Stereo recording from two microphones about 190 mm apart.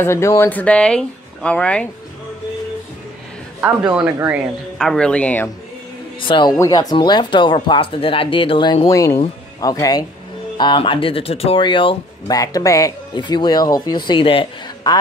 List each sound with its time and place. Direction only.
0.0 s speech: 15° left (ahead or behind)
3.9 s speech: 10° right (ahead or behind)
4.7 s speech: 5° left (ahead or behind)
6.2 s speech: 25° left (ahead or behind)